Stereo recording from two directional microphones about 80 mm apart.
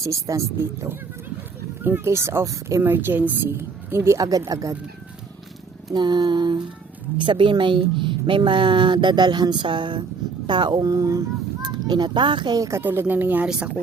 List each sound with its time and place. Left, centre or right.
0.0 s a woman's voice: right
2.8 s a woman's voice: right
5.9 s mantra: right
7.2 s a woman's voice: right
10.4 s mantra: right
10.9 s speech: right
12.5 s a woman's voice: right
12.8 s speech: right
13.4 s speech: centre